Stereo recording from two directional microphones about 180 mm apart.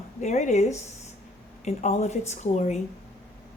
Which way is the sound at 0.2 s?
40° left (ahead or behind).